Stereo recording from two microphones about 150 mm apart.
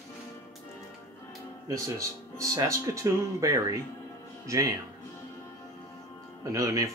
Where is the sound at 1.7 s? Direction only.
20° right (ahead or behind).